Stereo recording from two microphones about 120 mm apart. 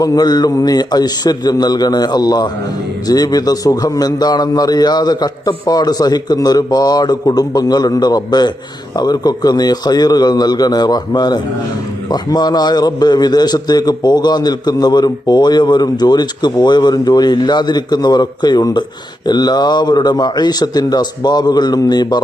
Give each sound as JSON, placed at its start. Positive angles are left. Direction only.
{"t": 0.0, "sound": "a man's voice", "side_deg": 30}